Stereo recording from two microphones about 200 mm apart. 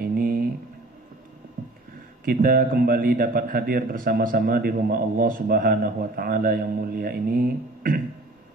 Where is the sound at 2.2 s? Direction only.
45° right (ahead or behind).